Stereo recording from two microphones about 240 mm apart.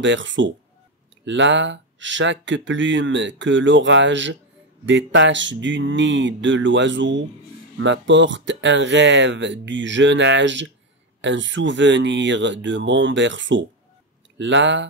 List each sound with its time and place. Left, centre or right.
0.0 s speech: right